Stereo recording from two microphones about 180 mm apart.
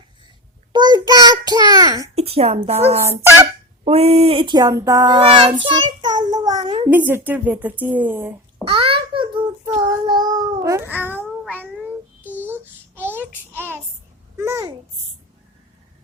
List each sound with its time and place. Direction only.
0.7 s child singing: 25° right (ahead or behind)
2.1 s a woman's voice: 35° right (ahead or behind)
3.8 s speech: 35° right (ahead or behind)
6.9 s speech: 10° right (ahead or behind)
8.7 s child singing: 30° right (ahead or behind); by 11.2 s 10° right (ahead or behind)
12.5 s a sound: 10° right (ahead or behind)
13.3 s child singing: 10° left (ahead or behind)
14.3 s babbling: 15° right (ahead or behind)